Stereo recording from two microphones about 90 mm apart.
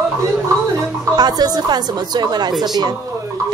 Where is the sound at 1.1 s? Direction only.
50° right (ahead or behind).